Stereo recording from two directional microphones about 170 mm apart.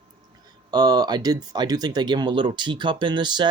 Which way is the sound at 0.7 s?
25° right (ahead or behind).